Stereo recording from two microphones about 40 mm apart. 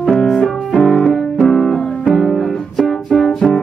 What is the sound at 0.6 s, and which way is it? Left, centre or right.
Music, centre.